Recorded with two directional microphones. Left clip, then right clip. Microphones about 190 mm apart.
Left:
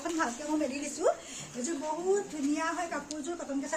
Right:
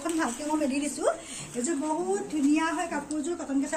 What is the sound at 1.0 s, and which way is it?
Speech, 20° left (ahead or behind).